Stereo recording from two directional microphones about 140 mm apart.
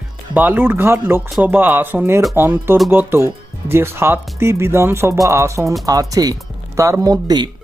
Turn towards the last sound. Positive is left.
turn(degrees=-30)  # may be behind; listen again after turning